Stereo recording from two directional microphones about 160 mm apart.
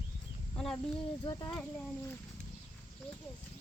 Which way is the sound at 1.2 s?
25° left (ahead or behind).